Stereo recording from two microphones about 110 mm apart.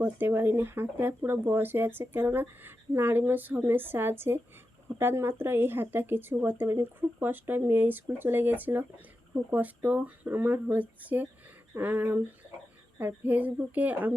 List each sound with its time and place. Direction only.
0.0 s speech: 20° right (ahead or behind)